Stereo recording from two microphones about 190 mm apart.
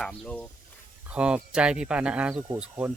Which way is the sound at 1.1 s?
5° right (ahead or behind).